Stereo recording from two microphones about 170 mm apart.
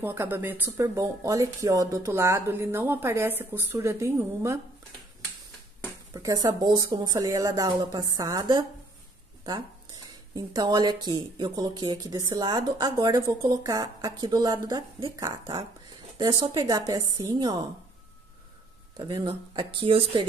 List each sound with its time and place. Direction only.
0.0 s speech: 15° right (ahead or behind)
6.1 s speech: 20° right (ahead or behind)
10.3 s speech: 25° right (ahead or behind)
18.9 s speech: 30° right (ahead or behind)